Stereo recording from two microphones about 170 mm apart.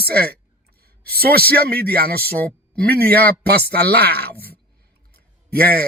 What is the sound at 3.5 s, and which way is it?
Speech, 65° right (ahead or behind).